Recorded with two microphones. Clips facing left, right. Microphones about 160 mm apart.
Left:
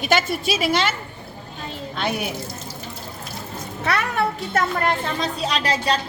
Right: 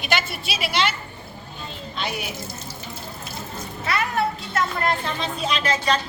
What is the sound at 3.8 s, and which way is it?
Speech, 70° left (ahead or behind).